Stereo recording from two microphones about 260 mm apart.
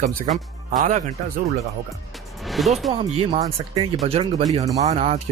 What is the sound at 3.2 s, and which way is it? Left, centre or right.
Speech, right.